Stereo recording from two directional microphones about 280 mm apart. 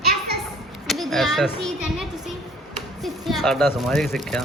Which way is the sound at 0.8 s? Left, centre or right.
Centre.